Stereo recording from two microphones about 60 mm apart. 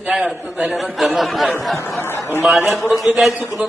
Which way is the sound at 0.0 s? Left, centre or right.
Centre.